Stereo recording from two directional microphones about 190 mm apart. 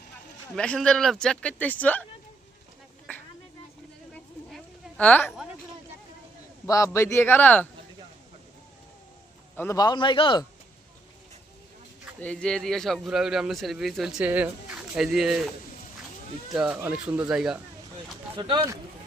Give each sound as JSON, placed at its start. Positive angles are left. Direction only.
{"t": 0.5, "sound": "a man's voice", "side_deg": 5}
{"t": 4.1, "sound": "a sound", "side_deg": 5}
{"t": 6.7, "sound": "a man's voice", "side_deg": 15}
{"t": 9.6, "sound": "a man's voice", "side_deg": 15}
{"t": 12.2, "sound": "a man's voice", "side_deg": 5}
{"t": 16.5, "sound": "a man's voice", "side_deg": -5}
{"t": 17.9, "sound": "a sound", "side_deg": -25}